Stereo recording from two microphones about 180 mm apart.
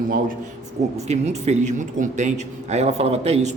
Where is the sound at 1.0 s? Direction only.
40° right (ahead or behind).